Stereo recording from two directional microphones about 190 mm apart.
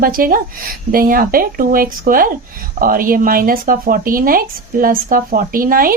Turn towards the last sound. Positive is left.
turn(degrees=-50)  # may be behind; listen again after turning